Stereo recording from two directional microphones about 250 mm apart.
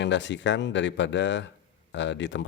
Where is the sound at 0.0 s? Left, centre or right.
Left.